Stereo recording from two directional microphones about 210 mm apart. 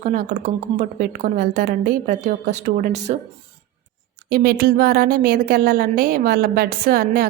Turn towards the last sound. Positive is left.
turn(degrees=-45)  # may be behind; listen again after turning